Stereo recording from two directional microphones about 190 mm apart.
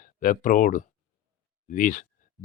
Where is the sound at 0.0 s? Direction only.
45° left (ahead or behind).